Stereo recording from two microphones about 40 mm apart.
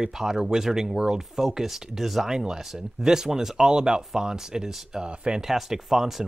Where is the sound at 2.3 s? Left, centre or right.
Centre.